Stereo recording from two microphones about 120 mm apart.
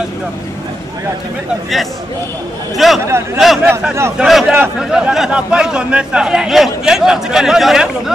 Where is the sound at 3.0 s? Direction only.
20° right (ahead or behind).